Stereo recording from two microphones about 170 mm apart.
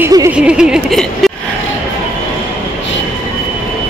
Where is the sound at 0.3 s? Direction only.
5° right (ahead or behind).